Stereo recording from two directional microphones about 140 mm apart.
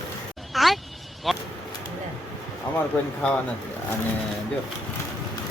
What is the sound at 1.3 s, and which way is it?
Speech, centre (ahead or behind).